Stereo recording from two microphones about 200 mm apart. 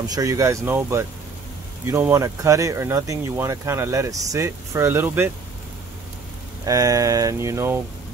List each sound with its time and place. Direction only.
0.0 s speech: 20° right (ahead or behind)
6.6 s speech: 15° right (ahead or behind)